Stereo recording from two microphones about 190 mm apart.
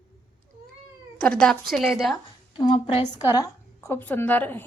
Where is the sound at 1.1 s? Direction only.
5° left (ahead or behind).